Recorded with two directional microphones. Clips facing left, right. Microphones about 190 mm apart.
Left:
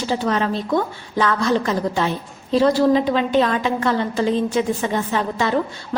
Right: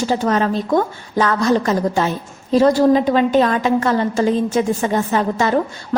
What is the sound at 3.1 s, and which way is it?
A woman's voice, 45° right (ahead or behind).